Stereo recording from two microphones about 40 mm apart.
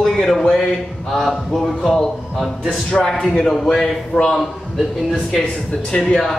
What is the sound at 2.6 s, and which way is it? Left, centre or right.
A man's voice, centre.